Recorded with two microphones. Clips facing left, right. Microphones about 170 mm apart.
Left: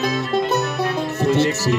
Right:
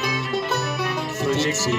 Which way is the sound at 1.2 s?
60° left (ahead or behind).